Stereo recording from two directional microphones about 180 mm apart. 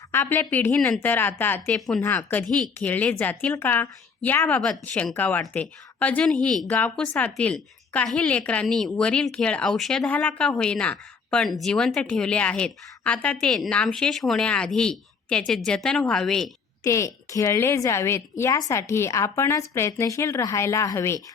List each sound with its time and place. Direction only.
0.1 s a woman's voice: 10° left (ahead or behind)
16.8 s a woman's voice: 15° left (ahead or behind)